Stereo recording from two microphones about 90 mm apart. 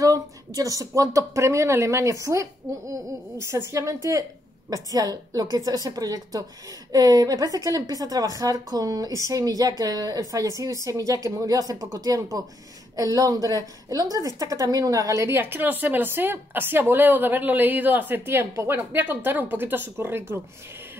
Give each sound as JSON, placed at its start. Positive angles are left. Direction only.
{"t": 0.0, "sound": "a woman's voice", "side_deg": -40}